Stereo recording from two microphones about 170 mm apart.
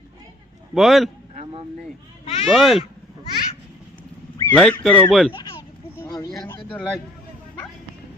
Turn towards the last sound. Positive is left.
turn(degrees=5)  # may be behind; listen again after turning